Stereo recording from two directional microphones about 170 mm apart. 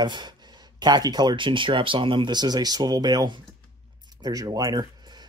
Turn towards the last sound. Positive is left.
turn(degrees=-25)  # may be behind; listen again after turning